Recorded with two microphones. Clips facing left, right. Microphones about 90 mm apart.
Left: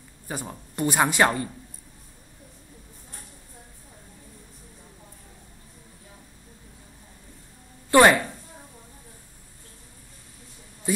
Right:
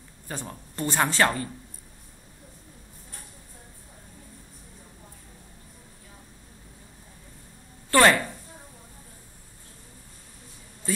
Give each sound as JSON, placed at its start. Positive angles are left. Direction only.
{"t": 0.3, "sound": "speech", "side_deg": 15}
{"t": 7.9, "sound": "a woman's voice", "side_deg": 15}